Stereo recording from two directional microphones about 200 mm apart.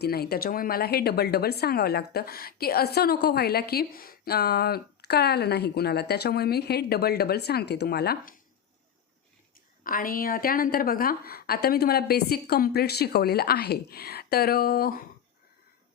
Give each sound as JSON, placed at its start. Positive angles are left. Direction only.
{"t": 0.0, "sound": "speech", "side_deg": 50}
{"t": 9.8, "sound": "speech", "side_deg": 45}